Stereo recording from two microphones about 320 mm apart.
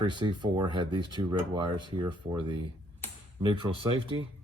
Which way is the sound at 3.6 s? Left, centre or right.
Centre.